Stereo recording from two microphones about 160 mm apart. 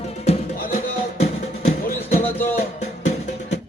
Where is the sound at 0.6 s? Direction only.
55° left (ahead or behind).